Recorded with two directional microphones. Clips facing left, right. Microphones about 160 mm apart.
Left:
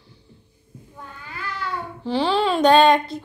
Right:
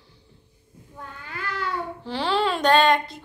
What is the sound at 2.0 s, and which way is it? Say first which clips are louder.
Speech: left 4 dB; 20° left (ahead or behind).